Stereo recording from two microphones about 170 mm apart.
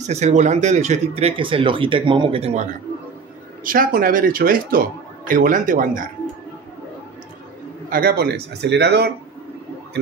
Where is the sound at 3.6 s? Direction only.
55° right (ahead or behind).